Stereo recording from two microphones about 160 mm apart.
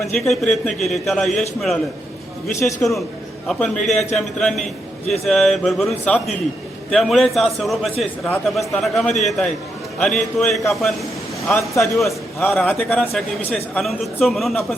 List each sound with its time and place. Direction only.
0.0 s a man's voice: centre (ahead or behind)
2.8 s a man's voice: 10° left (ahead or behind)
11.4 s a man's voice: 15° left (ahead or behind)
11.9 s a man's voice: centre (ahead or behind)